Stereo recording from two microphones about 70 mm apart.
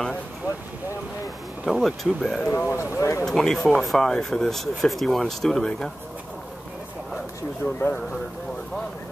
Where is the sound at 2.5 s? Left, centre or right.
Left.